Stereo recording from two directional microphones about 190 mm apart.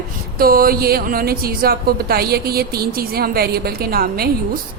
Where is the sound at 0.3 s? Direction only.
50° right (ahead or behind).